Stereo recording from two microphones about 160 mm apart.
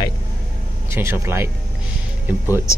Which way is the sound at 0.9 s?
15° right (ahead or behind).